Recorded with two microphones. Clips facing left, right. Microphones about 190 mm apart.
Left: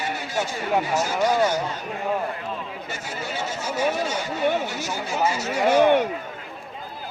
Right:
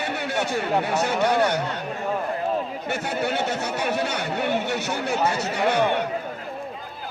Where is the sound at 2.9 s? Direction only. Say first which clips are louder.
Right 8 dB; 65° right (ahead or behind).